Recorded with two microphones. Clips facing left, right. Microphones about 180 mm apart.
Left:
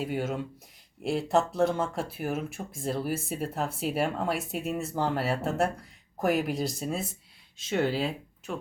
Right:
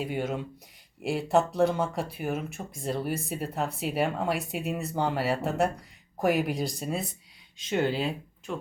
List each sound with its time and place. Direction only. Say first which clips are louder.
0.0 s speech: even; centre (ahead or behind)